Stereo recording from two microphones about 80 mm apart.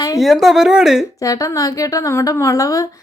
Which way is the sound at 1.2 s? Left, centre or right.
Left.